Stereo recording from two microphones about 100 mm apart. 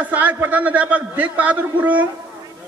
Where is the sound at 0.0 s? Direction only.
15° right (ahead or behind).